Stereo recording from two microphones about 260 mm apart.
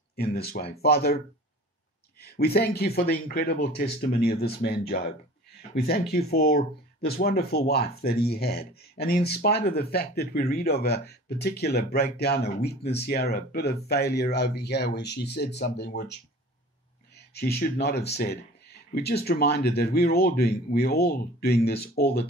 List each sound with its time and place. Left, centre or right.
0.1 s speech: left
2.2 s speech: left
17.3 s speech: left